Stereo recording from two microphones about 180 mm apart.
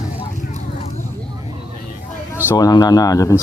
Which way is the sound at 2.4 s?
20° left (ahead or behind).